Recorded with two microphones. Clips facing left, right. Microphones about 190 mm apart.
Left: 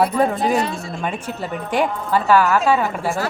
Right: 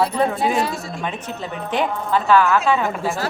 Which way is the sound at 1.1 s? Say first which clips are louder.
Left 4 dB; 10° left (ahead or behind).